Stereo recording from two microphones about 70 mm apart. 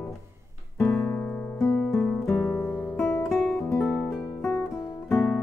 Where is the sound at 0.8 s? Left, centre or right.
Centre.